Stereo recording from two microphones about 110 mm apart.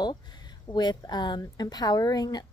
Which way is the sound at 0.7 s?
40° left (ahead or behind).